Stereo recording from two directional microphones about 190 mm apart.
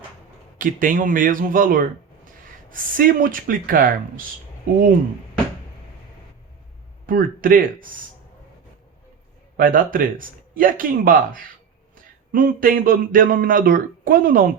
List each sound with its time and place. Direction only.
0.6 s speech: 45° right (ahead or behind)
7.1 s speech: 45° right (ahead or behind)
9.6 s speech: 45° right (ahead or behind)